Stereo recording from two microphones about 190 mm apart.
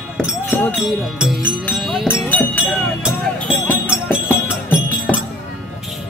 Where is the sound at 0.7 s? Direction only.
Centre (ahead or behind).